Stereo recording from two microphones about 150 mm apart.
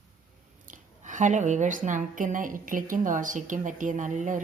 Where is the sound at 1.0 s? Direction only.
55° right (ahead or behind).